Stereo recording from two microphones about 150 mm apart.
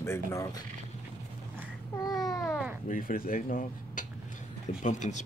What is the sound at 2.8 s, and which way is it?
Speech, 70° left (ahead or behind).